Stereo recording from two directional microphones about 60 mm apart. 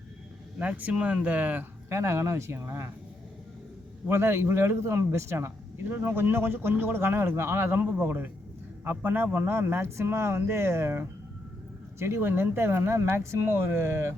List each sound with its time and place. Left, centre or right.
0.6 s speech: right
1.9 s speech: right
4.1 s speech: right
5.8 s speech: right